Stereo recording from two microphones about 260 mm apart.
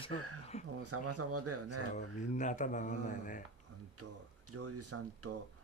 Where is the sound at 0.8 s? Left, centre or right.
Right.